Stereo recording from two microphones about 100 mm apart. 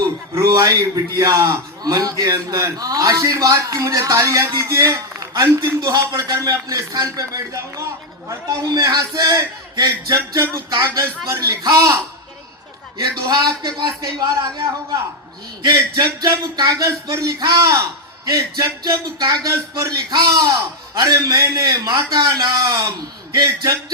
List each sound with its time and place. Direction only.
0.3 s a man's voice: 35° right (ahead or behind)
10.2 s music: 25° right (ahead or behind)
11.3 s a man's voice: 35° right (ahead or behind)
13.2 s a man's voice: 40° right (ahead or behind)
14.6 s music: 25° right (ahead or behind)
15.7 s a man's voice: 35° right (ahead or behind)